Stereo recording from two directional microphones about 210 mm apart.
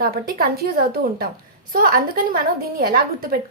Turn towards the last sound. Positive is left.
turn(degrees=-45)  # may be behind; listen again after turning